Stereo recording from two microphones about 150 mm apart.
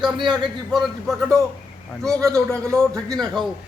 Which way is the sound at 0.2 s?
30° right (ahead or behind).